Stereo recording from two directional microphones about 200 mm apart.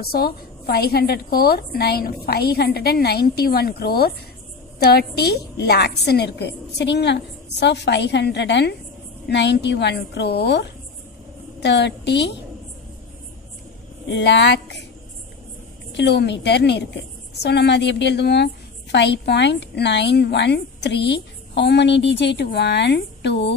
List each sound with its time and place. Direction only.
0.0 s a woman's voice: 50° left (ahead or behind)
14.0 s a woman's voice: 60° left (ahead or behind)
15.9 s a woman's voice: 55° left (ahead or behind)